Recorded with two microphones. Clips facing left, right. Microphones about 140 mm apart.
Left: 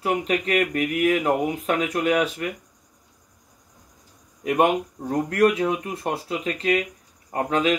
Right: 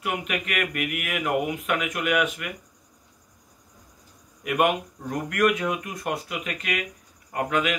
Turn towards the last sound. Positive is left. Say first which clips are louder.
# left 3 dB
turn(degrees=30)  # may be behind; listen again after turning